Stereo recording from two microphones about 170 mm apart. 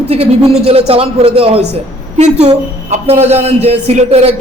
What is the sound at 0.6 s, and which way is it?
A man's voice, 35° right (ahead or behind).